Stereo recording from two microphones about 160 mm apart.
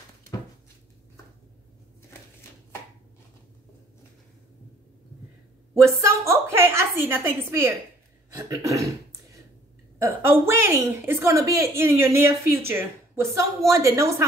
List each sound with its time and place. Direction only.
5.9 s a woman's voice: 15° right (ahead or behind)
8.3 s a sound: 20° right (ahead or behind)
9.9 s a woman's voice: 15° right (ahead or behind)